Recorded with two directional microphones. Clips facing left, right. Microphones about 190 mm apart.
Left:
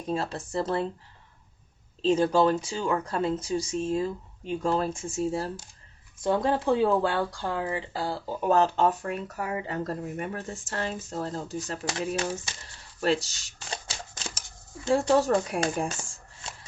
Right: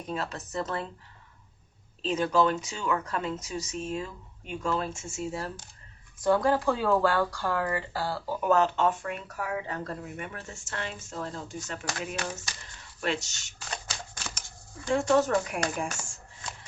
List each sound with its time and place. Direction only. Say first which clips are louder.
0.1 s speech: left 5 dB; 30° left (ahead or behind)
2.0 s speech: left 3 dB; 30° left (ahead or behind)
6.2 s speech: even; 25° left (ahead or behind)
11.9 s speech: left 7 dB; 25° left (ahead or behind)
13.0 s speech: left 5 dB; 35° left (ahead or behind)
14.8 s speech: left 2 dB; 35° left (ahead or behind)